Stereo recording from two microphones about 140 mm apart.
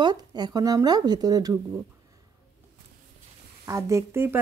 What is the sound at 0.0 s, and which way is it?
Speech, 30° right (ahead or behind).